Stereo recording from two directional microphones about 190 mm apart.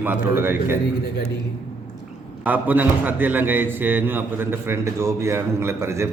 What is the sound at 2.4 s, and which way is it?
A man's voice, 10° right (ahead or behind).